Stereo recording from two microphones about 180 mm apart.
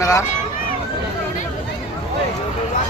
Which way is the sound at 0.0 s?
20° left (ahead or behind).